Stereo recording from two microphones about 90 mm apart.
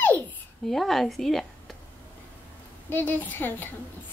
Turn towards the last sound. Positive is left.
turn(degrees=20)  # may be behind; listen again after turning